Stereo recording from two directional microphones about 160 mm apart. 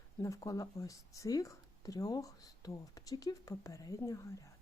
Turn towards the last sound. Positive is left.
turn(degrees=20)  # may be behind; listen again after turning